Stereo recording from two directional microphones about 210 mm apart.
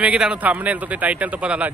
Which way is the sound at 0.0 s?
5° right (ahead or behind).